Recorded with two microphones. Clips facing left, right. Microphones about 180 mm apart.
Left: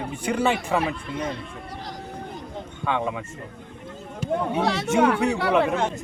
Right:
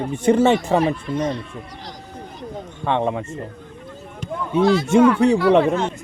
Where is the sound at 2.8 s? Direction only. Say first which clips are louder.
Right 5 dB; 35° right (ahead or behind).